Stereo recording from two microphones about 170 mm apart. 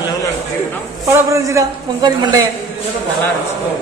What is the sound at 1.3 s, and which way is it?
A man's voice, 20° right (ahead or behind).